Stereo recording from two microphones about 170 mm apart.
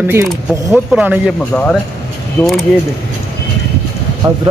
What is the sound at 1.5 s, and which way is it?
Speech, 5° left (ahead or behind).